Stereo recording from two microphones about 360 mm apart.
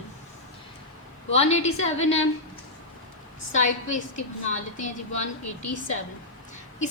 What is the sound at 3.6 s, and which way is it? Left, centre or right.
A woman's voice, centre.